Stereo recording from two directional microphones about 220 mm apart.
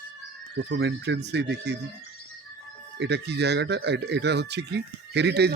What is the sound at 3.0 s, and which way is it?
Speech, 50° right (ahead or behind).